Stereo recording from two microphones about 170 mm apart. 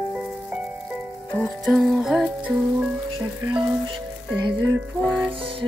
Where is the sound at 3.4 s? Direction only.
30° right (ahead or behind).